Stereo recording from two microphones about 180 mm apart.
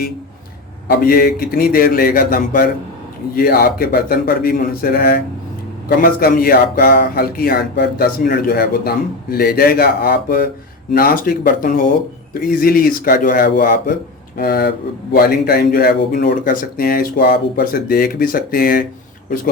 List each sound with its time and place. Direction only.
0.9 s speech: 55° left (ahead or behind)